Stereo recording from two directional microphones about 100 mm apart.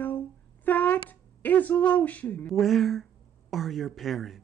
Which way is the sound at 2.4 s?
Centre (ahead or behind).